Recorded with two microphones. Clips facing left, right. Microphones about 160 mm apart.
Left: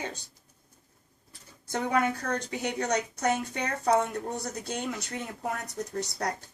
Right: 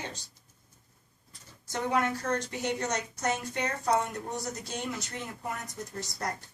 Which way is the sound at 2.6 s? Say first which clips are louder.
Left 2 dB; 65° left (ahead or behind).